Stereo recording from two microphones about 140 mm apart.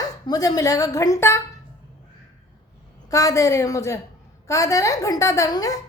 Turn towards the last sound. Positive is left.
turn(degrees=25)  # may be behind; listen again after turning